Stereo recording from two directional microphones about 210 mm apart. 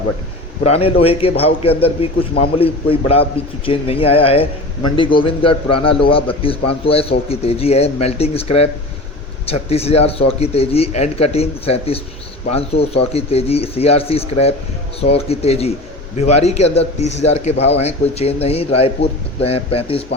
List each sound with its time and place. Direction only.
0.6 s a man's voice: 30° left (ahead or behind)